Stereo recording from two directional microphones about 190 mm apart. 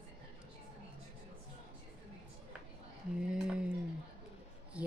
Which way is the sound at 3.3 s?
5° right (ahead or behind).